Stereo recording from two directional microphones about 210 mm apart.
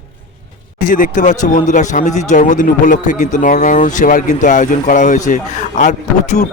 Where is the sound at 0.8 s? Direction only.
40° left (ahead or behind).